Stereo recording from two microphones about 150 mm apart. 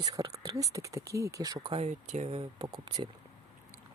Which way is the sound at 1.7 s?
45° right (ahead or behind).